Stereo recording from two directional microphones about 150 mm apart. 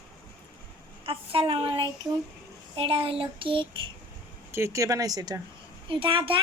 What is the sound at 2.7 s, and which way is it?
Child singing, 40° right (ahead or behind).